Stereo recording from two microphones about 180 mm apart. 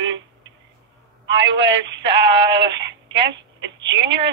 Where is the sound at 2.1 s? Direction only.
75° right (ahead or behind).